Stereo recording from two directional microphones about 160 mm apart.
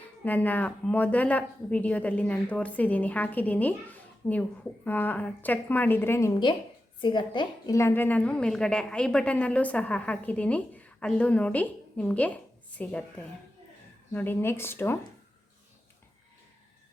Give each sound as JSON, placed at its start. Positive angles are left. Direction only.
{"t": 0.3, "sound": "a woman's voice", "side_deg": 10}
{"t": 4.9, "sound": "a woman's voice", "side_deg": 10}
{"t": 7.0, "sound": "a woman's voice", "side_deg": 30}
{"t": 7.8, "sound": "a woman's voice", "side_deg": 15}